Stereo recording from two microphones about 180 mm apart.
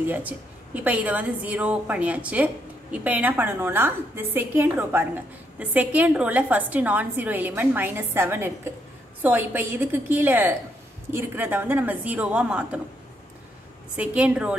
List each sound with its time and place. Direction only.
0.0 s a woman's voice: 10° right (ahead or behind)
13.9 s a woman's voice: 5° right (ahead or behind)